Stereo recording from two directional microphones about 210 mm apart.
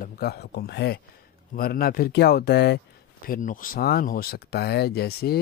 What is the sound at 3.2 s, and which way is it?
Speech, 40° left (ahead or behind).